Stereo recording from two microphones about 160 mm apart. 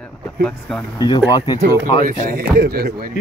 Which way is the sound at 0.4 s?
5° left (ahead or behind).